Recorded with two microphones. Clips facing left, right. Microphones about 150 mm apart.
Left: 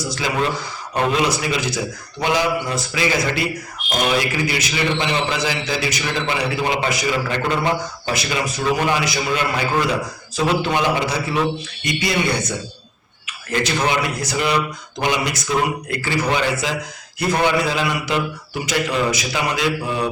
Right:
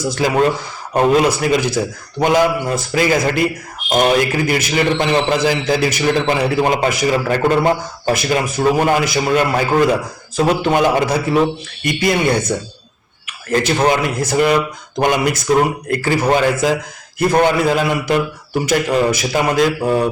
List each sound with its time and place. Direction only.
0.2 s a man's voice: 45° right (ahead or behind)